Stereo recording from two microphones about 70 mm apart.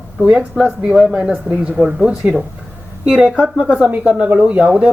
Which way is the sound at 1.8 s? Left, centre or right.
Centre.